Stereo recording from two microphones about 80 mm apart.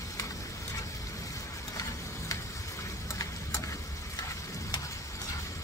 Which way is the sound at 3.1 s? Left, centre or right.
Left.